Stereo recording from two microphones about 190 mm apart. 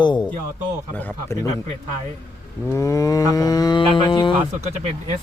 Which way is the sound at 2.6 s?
15° left (ahead or behind).